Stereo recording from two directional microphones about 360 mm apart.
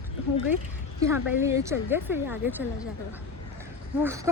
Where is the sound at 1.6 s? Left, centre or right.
Centre.